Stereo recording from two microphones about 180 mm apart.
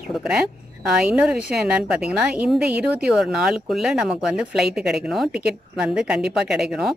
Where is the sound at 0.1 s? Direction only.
5° right (ahead or behind).